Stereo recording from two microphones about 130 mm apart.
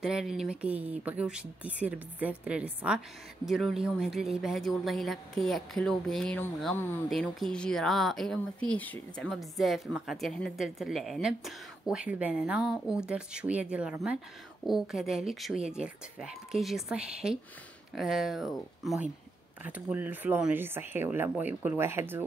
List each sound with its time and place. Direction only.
0.0 s a woman's voice: centre (ahead or behind)
19.6 s speech: 10° right (ahead or behind)